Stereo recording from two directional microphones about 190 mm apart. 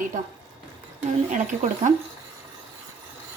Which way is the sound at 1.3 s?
40° right (ahead or behind).